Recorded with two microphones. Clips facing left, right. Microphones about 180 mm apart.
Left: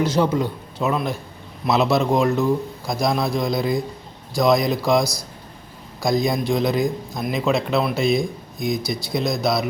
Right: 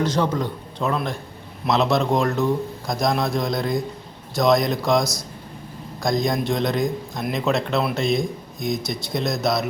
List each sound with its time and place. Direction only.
0.0 s a man's voice: 10° left (ahead or behind)